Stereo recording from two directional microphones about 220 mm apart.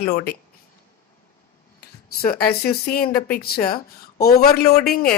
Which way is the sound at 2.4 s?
45° left (ahead or behind).